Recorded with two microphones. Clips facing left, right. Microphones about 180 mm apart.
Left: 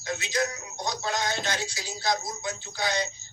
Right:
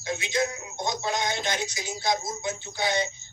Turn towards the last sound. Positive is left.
turn(degrees=-25)  # may be behind; listen again after turning